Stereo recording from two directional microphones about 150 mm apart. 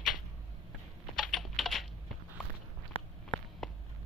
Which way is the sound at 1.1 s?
Centre (ahead or behind).